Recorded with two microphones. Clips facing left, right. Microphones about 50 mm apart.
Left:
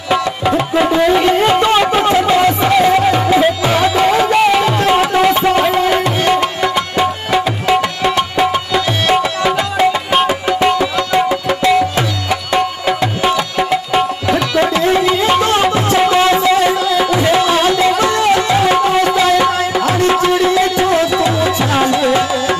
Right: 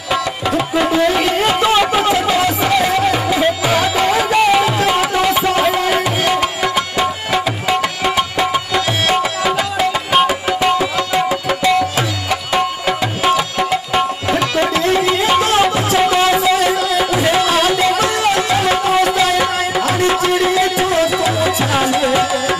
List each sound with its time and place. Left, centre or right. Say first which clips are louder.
0.1 s music: left 3 dB; centre
17.5 s music: left 2 dB; centre
21.7 s tabla: left 2 dB; centre